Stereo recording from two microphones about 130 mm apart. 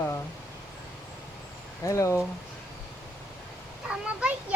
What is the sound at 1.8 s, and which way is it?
Speech, 25° left (ahead or behind).